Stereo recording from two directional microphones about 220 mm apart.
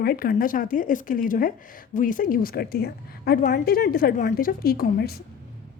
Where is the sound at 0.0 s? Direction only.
40° left (ahead or behind).